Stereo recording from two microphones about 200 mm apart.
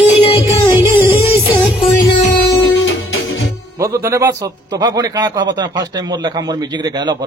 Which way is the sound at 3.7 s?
15° right (ahead or behind).